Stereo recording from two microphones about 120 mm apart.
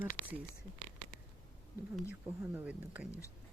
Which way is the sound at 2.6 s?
15° right (ahead or behind).